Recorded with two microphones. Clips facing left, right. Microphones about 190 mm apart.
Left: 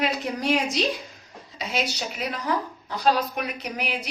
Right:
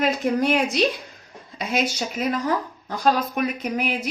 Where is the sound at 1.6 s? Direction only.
50° right (ahead or behind).